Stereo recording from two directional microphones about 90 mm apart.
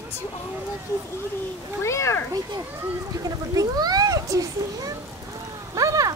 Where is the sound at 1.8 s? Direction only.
30° left (ahead or behind).